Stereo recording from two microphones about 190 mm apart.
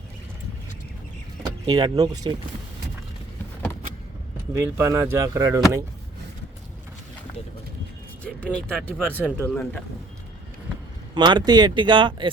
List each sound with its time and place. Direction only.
1.6 s speech: 20° right (ahead or behind)
4.5 s speech: 15° right (ahead or behind)
8.6 s speech: 5° left (ahead or behind)
11.1 s speech: 25° right (ahead or behind)